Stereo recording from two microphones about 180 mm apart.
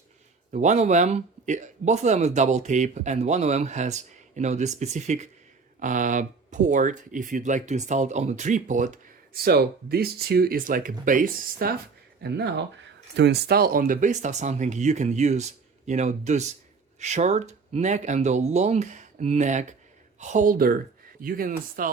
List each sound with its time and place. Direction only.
0.5 s speech: 40° right (ahead or behind)
12.2 s speech: 70° right (ahead or behind); by 21.8 s 50° right (ahead or behind)